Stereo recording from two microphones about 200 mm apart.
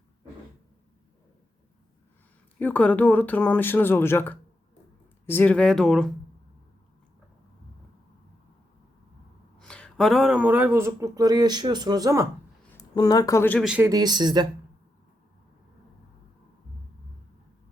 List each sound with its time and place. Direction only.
2.6 s speech: 10° left (ahead or behind)
9.6 s speech: 5° left (ahead or behind); by 12.2 s 20° right (ahead or behind)
12.7 s speech: 20° left (ahead or behind)
13.7 s speech: 5° right (ahead or behind)
13.9 s speech: 20° right (ahead or behind)